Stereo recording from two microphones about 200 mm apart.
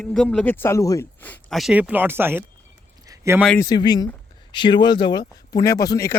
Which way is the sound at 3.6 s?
20° left (ahead or behind).